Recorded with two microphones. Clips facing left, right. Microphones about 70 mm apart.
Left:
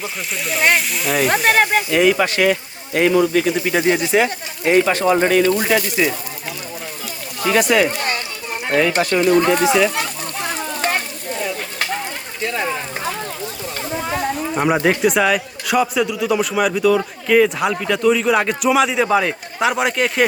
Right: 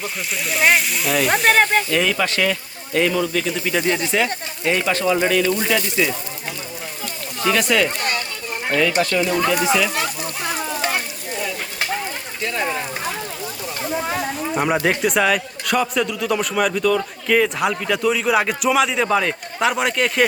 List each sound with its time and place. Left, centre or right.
0.0 s a man's voice: centre; by 6.1 s left
7.4 s speech: centre
9.0 s speech: left
9.2 s speech: left
12.4 s speech: centre
14.5 s a man's voice: centre